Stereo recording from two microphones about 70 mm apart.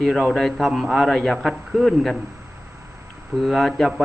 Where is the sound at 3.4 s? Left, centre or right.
Centre.